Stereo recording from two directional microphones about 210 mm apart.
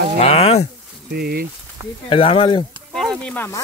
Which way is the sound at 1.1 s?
50° right (ahead or behind).